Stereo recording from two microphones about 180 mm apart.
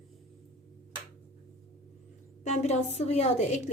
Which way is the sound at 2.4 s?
40° left (ahead or behind).